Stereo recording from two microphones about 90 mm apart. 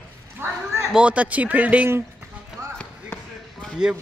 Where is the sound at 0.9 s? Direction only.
15° right (ahead or behind).